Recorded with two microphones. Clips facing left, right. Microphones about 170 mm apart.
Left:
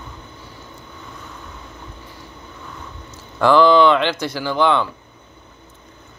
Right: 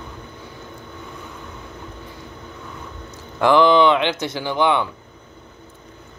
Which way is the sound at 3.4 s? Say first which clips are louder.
Left 1 dB; 20° right (ahead or behind).